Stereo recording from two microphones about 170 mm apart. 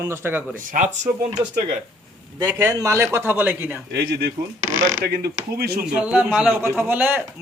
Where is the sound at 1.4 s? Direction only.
25° right (ahead or behind).